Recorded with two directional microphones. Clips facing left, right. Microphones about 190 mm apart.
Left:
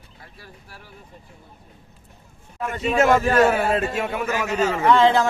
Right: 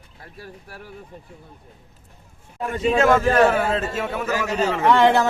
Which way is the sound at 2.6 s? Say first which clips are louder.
Right 3 dB; 35° right (ahead or behind).